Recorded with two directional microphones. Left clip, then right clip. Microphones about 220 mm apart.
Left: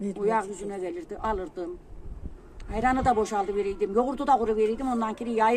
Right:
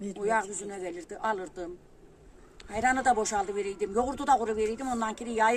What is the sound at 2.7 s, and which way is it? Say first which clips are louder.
Speech: left 1 dB; 15° right (ahead or behind).